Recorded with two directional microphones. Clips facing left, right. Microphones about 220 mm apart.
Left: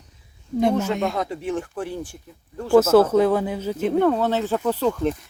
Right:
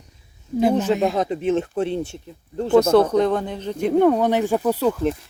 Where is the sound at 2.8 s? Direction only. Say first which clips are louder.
Left 1 dB; 5° left (ahead or behind).